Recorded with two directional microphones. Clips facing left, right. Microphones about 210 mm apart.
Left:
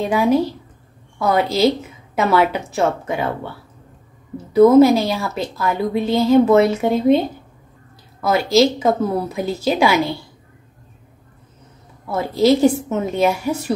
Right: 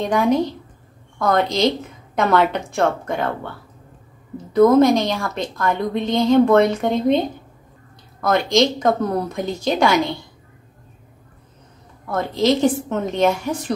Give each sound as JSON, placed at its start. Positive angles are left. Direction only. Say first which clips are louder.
{"t": 0.0, "sound": "a woman's voice", "louder": "left 1 dB", "side_deg": 5}
{"t": 8.5, "sound": "a woman's voice", "louder": "left 4 dB", "side_deg": 5}
{"t": 12.1, "sound": "a woman's voice", "louder": "left 3 dB", "side_deg": 10}